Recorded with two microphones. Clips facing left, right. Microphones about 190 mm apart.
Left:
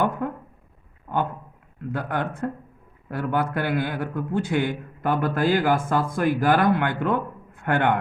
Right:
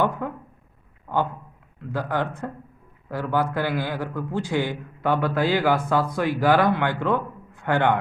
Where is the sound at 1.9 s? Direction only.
55° left (ahead or behind).